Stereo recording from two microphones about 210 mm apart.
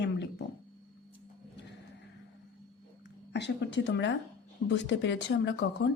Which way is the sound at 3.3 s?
55° left (ahead or behind).